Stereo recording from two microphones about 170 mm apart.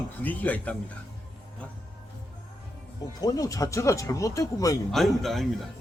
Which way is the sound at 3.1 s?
20° left (ahead or behind).